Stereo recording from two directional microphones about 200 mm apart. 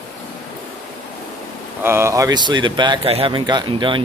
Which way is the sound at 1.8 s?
10° right (ahead or behind).